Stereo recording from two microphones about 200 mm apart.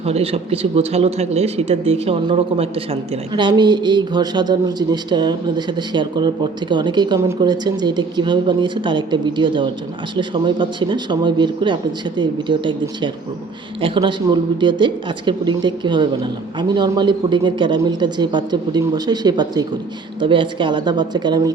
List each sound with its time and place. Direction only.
0.0 s speech: 30° right (ahead or behind)